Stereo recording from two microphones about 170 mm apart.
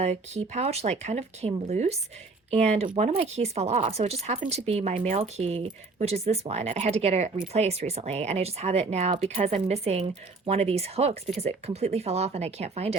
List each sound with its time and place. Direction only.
0.0 s speech: 40° right (ahead or behind)
5.2 s speech: 35° right (ahead or behind)